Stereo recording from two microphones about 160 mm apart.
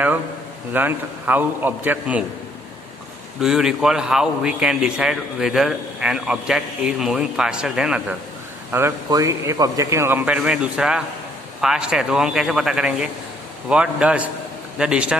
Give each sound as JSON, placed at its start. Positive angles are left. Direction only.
{"t": 0.7, "sound": "a man's voice", "side_deg": -10}
{"t": 3.3, "sound": "a man's voice", "side_deg": -5}
{"t": 8.7, "sound": "a man's voice", "side_deg": -20}